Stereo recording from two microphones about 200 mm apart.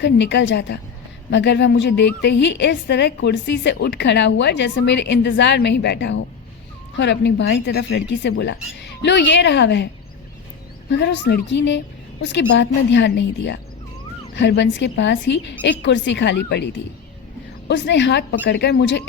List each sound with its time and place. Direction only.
0.0 s a woman's voice: 60° left (ahead or behind)